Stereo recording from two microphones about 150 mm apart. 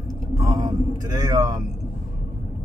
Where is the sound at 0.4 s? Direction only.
25° right (ahead or behind).